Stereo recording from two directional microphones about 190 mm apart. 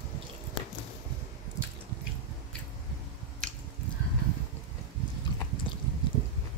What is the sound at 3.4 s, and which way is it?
Finger snapping, 5° left (ahead or behind).